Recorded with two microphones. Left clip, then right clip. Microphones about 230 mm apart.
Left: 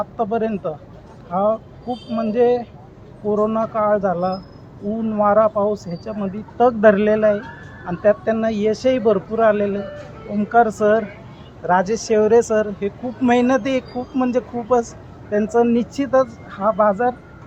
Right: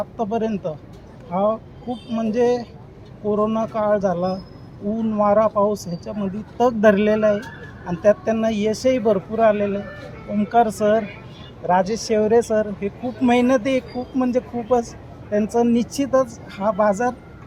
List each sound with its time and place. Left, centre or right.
0.2 s speech: centre